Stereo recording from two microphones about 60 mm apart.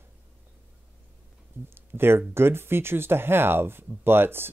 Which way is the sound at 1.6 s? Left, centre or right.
Right.